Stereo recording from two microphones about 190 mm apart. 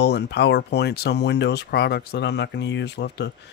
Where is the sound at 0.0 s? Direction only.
60° left (ahead or behind).